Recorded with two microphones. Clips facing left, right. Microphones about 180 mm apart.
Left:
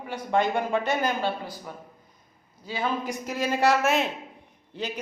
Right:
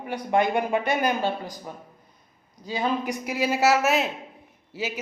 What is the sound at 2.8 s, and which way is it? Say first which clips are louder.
A woman's voice: right 2 dB; 15° right (ahead or behind).